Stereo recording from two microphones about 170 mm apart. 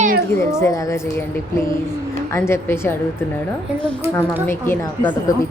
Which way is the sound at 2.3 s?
15° left (ahead or behind).